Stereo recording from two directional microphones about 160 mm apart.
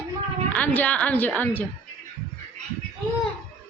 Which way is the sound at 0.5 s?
10° left (ahead or behind).